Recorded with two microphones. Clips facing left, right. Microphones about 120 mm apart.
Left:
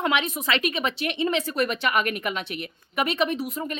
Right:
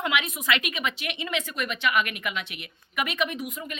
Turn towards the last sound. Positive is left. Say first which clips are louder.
# left 6 dB
turn(degrees=35)  # may be behind; listen again after turning